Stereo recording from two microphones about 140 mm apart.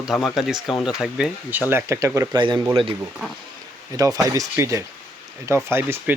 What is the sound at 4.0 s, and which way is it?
Speech, 25° right (ahead or behind).